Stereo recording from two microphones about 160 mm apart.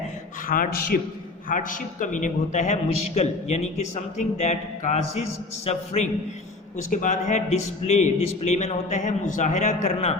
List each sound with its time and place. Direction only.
0.4 s a man's voice: 65° left (ahead or behind)
1.5 s a man's voice: 55° left (ahead or behind)